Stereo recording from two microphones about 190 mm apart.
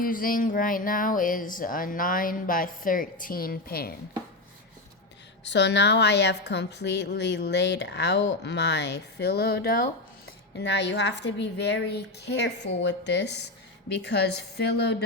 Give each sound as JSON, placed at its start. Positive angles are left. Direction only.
{"t": 0.0, "sound": "speech", "side_deg": 45}
{"t": 5.5, "sound": "a woman's voice", "side_deg": 65}
{"t": 10.5, "sound": "a woman's voice", "side_deg": 65}